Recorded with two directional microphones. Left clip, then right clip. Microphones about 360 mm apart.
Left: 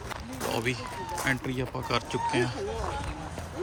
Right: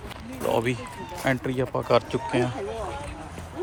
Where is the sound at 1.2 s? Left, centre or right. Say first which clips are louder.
Right 7 dB; centre.